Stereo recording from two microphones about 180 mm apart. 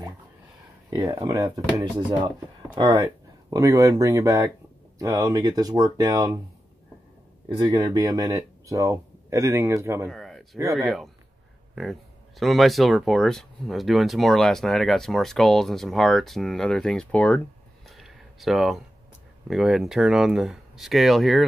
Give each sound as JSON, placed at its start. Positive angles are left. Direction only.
{"t": 0.8, "sound": "speech", "side_deg": -25}
{"t": 2.7, "sound": "speech", "side_deg": -25}
{"t": 7.7, "sound": "speech", "side_deg": -20}
{"t": 10.1, "sound": "a sound", "side_deg": 0}
{"t": 10.8, "sound": "speech", "side_deg": 0}
{"t": 17.8, "sound": "a sound", "side_deg": 0}
{"t": 19.4, "sound": "speech", "side_deg": -5}